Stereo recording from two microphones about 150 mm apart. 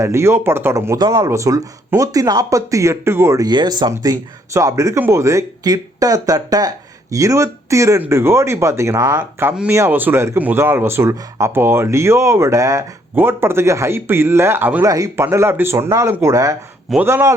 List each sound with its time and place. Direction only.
0.0 s speech: 20° right (ahead or behind)